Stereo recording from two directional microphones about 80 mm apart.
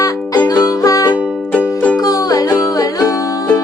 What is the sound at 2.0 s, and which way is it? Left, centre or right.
Music, left.